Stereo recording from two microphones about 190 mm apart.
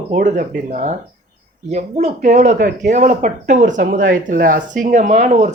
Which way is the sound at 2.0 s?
40° right (ahead or behind).